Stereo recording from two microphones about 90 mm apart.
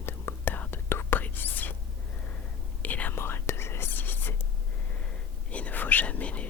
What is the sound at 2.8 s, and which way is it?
Whispering, 20° left (ahead or behind).